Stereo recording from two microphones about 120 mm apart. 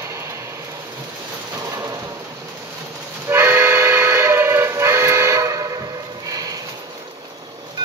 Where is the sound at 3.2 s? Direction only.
20° right (ahead or behind).